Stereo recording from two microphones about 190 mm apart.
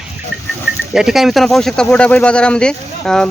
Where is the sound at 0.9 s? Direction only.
Centre (ahead or behind).